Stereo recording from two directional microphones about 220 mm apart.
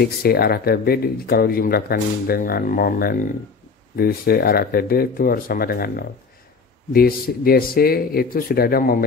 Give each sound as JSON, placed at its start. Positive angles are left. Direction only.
{"t": 0.0, "sound": "speech", "side_deg": 45}